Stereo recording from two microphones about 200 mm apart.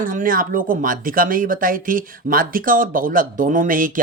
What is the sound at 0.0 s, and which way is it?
Speech, 45° right (ahead or behind).